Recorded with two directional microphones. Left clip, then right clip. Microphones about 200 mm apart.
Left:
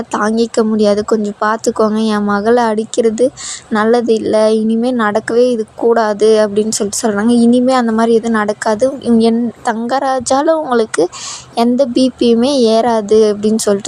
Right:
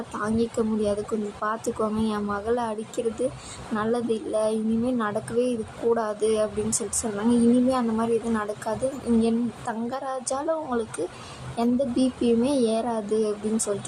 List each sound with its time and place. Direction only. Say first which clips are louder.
0.1 s a woman's voice: left 13 dB; 45° left (ahead or behind)